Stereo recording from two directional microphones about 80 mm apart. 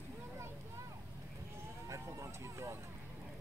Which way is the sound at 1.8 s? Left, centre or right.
Right.